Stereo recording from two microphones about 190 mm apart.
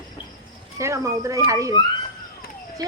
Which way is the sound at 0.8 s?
15° right (ahead or behind).